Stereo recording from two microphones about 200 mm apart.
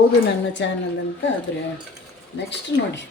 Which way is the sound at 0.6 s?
65° left (ahead or behind).